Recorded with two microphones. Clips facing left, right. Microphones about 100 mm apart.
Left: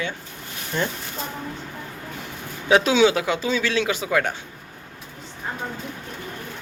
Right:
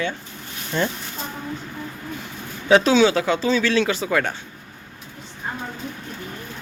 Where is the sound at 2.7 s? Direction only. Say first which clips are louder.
Right 2 dB; 15° left (ahead or behind).